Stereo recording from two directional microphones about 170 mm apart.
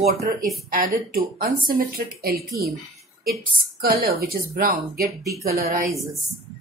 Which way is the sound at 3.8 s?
60° right (ahead or behind).